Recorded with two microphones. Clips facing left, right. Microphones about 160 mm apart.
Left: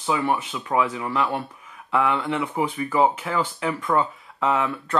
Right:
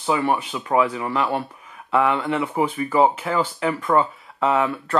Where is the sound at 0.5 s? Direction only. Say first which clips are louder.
Right 3 dB; 20° right (ahead or behind).